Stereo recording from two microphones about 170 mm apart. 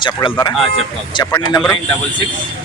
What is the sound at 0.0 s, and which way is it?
Speech, 25° left (ahead or behind).